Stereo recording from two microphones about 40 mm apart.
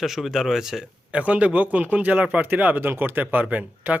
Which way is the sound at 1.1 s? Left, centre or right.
Right.